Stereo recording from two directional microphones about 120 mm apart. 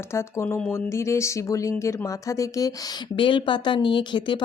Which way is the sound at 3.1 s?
45° left (ahead or behind).